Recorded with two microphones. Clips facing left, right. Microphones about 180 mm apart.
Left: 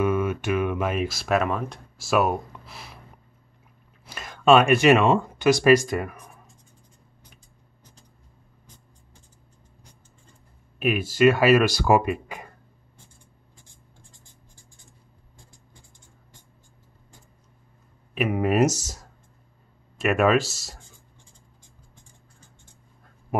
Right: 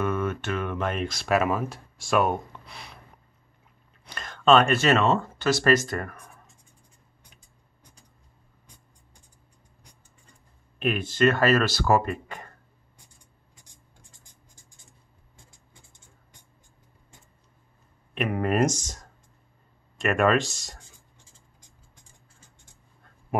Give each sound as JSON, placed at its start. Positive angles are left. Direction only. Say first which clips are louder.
{"t": 0.0, "sound": "speech", "louder": "left 4 dB", "side_deg": 10}
{"t": 4.0, "sound": "speech", "louder": "left 2 dB", "side_deg": 5}
{"t": 10.8, "sound": "speech", "louder": "left 3 dB", "side_deg": 5}
{"t": 14.1, "sound": "writing", "louder": "left 3 dB", "side_deg": -20}
{"t": 15.3, "sound": "a sound", "louder": "left 2 dB", "side_deg": -20}
{"t": 18.1, "sound": "speech", "louder": "left 3 dB", "side_deg": 5}